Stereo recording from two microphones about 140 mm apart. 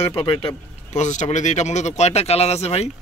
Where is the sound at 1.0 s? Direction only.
55° left (ahead or behind).